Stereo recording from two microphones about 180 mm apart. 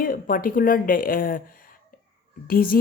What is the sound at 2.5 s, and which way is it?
Speech, 55° left (ahead or behind).